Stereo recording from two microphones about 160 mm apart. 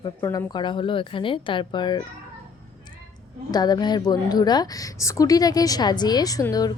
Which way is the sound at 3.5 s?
25° left (ahead or behind).